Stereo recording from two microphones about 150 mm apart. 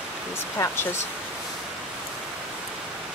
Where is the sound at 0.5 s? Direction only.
20° left (ahead or behind).